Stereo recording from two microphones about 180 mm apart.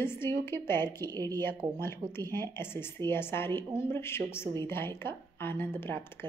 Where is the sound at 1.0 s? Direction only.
20° right (ahead or behind).